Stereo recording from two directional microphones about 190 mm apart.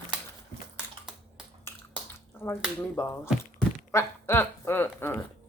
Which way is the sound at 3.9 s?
10° left (ahead or behind).